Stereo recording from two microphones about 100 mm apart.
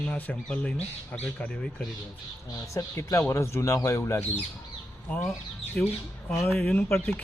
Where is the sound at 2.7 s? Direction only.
30° left (ahead or behind).